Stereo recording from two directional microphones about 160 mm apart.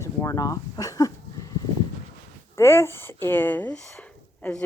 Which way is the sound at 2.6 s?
15° left (ahead or behind).